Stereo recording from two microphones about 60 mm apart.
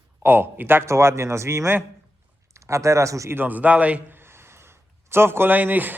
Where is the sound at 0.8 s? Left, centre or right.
Right.